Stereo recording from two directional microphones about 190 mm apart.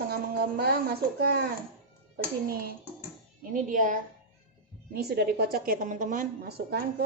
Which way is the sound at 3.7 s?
45° right (ahead or behind).